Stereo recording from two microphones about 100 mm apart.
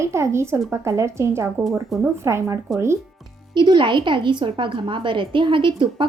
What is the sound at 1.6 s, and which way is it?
Speech, centre (ahead or behind).